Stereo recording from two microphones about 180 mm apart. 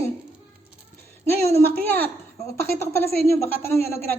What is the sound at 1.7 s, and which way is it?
Speech, 10° left (ahead or behind).